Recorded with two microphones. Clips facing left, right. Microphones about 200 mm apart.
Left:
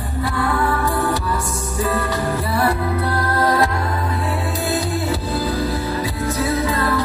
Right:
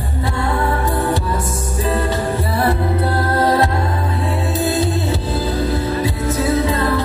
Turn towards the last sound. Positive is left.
turn(degrees=-20)  # may be behind; listen again after turning